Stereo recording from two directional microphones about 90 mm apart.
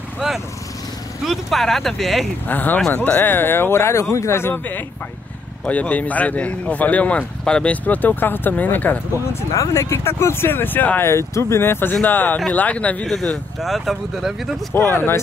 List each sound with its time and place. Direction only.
1.2 s speech: centre (ahead or behind)
2.4 s speech: 20° left (ahead or behind)
9.3 s speech: 35° left (ahead or behind)
11.1 s speech: 30° left (ahead or behind); by 14.5 s centre (ahead or behind)
14.7 s speech: 25° left (ahead or behind)